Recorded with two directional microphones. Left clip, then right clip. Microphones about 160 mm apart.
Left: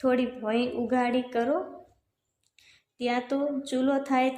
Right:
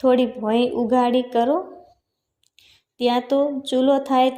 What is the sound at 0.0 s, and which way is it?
A woman's voice, 15° right (ahead or behind).